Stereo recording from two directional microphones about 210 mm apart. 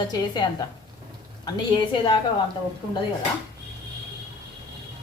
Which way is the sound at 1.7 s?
20° left (ahead or behind).